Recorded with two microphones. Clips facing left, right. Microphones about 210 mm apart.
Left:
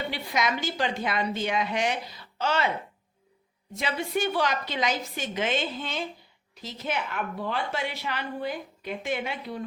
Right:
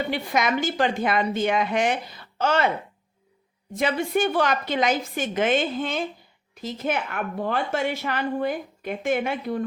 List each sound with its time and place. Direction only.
0.1 s a woman's voice: 50° right (ahead or behind)
3.7 s a woman's voice: 50° right (ahead or behind)